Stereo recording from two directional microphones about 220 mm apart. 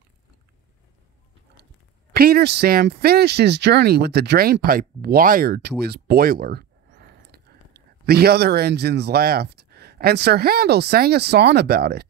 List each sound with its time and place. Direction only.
2.1 s speech: 45° right (ahead or behind)